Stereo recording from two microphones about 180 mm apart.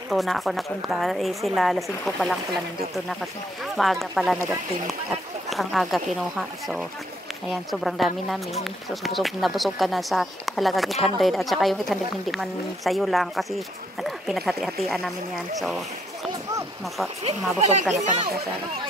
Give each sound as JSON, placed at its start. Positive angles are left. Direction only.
{"t": 0.1, "sound": "a woman's voice", "side_deg": 0}
{"t": 3.6, "sound": "a woman's voice", "side_deg": 0}
{"t": 5.5, "sound": "a woman's voice", "side_deg": 0}
{"t": 17.2, "sound": "speech", "side_deg": -35}